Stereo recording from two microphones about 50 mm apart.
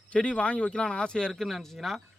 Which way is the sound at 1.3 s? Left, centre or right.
Centre.